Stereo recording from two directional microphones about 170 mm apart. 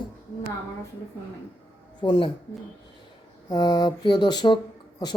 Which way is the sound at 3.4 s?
25° left (ahead or behind).